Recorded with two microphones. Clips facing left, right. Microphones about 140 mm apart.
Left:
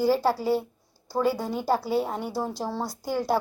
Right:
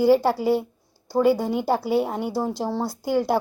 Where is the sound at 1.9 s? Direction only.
5° right (ahead or behind).